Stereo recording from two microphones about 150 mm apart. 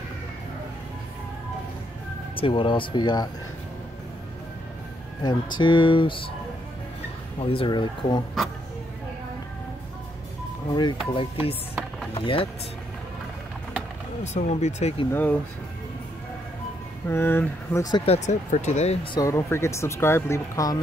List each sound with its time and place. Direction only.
2.3 s speech: 35° left (ahead or behind)
5.2 s speech: 30° left (ahead or behind)
7.3 s speech: 35° left (ahead or behind)
10.7 s speech: 30° left (ahead or behind)
14.2 s speech: 50° left (ahead or behind)
15.0 s speech: 10° left (ahead or behind)
17.1 s speech: 15° left (ahead or behind)
18.0 s speech: 45° left (ahead or behind)
19.1 s speech: 20° left (ahead or behind)